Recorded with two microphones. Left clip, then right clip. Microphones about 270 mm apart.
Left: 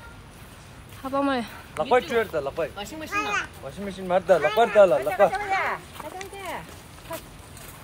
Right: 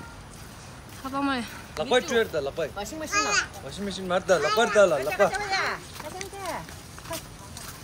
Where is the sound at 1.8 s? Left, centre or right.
Left.